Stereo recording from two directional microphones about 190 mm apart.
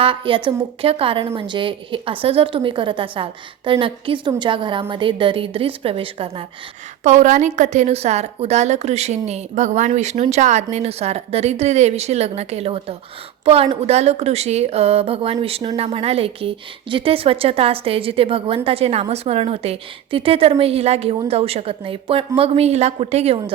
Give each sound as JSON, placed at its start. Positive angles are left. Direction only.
{"t": 0.0, "sound": "a woman's voice", "side_deg": -25}